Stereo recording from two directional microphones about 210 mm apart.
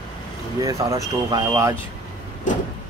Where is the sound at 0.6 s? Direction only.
15° right (ahead or behind).